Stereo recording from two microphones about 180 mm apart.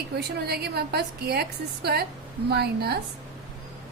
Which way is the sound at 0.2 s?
65° right (ahead or behind).